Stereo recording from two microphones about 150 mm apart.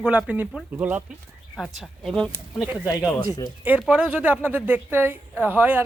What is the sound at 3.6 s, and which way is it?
Speech, 10° right (ahead or behind).